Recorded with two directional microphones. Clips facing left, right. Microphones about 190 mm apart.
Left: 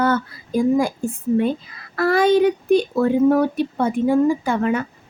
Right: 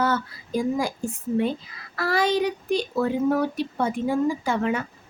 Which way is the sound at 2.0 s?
55° left (ahead or behind).